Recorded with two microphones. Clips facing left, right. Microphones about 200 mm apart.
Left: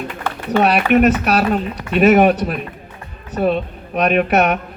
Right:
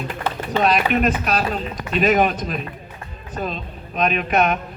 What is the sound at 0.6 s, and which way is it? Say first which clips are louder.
Speech: left 5 dB; 65° left (ahead or behind).